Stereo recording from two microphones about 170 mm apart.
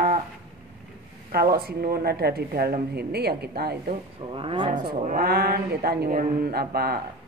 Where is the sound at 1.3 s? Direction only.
65° right (ahead or behind).